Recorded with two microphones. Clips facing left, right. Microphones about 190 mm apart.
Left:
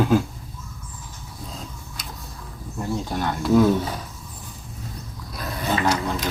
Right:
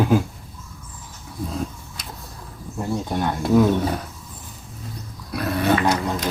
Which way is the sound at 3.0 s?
20° right (ahead or behind).